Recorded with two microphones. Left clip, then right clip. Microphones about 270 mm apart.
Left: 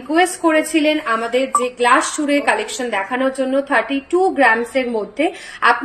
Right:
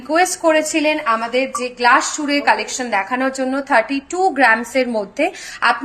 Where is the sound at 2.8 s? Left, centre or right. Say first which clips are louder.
Right 1 dB; right.